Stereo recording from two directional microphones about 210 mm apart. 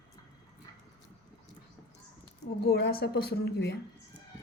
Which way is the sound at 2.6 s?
50° left (ahead or behind).